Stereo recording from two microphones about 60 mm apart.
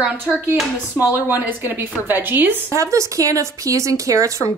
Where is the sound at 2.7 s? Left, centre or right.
Right.